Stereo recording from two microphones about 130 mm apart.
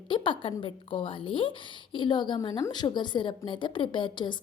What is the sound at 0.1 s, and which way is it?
A woman's voice, 40° left (ahead or behind).